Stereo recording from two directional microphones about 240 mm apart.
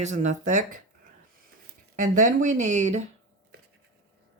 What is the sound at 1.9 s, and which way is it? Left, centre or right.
Speech, right.